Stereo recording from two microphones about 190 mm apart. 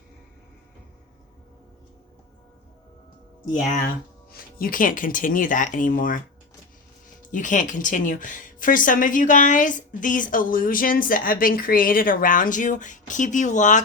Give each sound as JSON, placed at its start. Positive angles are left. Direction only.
{"t": 4.3, "sound": "a woman's voice", "side_deg": 50}
{"t": 7.3, "sound": "a woman's voice", "side_deg": 45}